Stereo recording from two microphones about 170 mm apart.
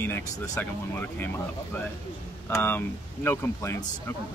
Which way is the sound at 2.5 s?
10° left (ahead or behind).